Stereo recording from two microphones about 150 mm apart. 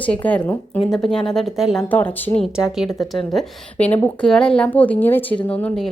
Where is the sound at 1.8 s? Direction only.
10° left (ahead or behind).